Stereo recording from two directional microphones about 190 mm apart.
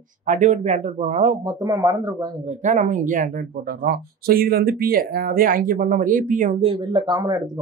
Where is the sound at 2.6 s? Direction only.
40° right (ahead or behind).